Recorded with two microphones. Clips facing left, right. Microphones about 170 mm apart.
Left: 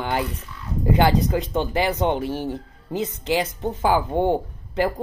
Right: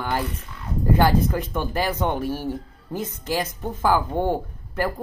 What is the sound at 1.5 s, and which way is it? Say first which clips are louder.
Speech: left 3 dB; 20° left (ahead or behind).